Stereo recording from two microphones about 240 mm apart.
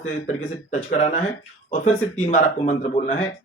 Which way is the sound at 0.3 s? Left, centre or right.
Left.